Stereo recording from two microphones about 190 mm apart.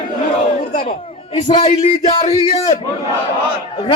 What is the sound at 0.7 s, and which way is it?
A man's voice, 35° left (ahead or behind).